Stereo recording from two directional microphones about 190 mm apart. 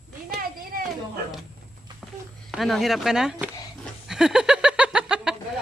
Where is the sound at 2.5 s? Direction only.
Centre (ahead or behind).